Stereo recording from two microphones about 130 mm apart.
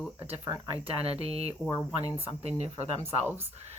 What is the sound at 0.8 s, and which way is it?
Speech, 50° right (ahead or behind).